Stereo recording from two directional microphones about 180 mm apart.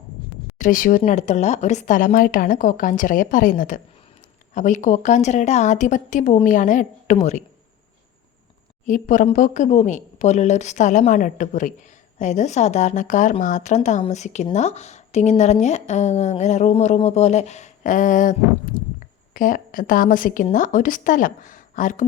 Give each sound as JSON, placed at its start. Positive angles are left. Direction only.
{"t": 0.6, "sound": "speech", "side_deg": 50}
{"t": 8.9, "sound": "a woman's voice", "side_deg": 45}